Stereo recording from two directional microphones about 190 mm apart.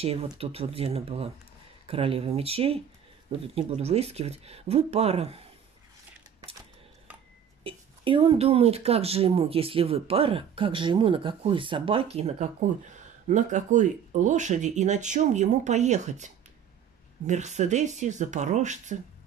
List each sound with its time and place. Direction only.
0.4 s speech: 30° right (ahead or behind)
7.6 s speech: 30° right (ahead or behind)
17.3 s speech: 40° right (ahead or behind)